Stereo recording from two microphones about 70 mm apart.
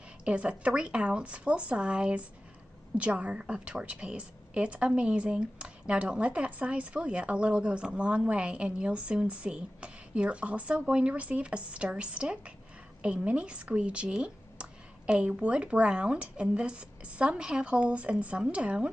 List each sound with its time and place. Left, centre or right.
0.2 s a woman's voice: centre